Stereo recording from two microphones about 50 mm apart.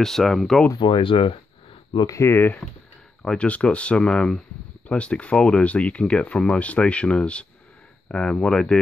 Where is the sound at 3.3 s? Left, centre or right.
Left.